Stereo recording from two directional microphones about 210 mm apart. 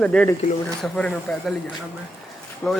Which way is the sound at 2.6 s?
5° left (ahead or behind).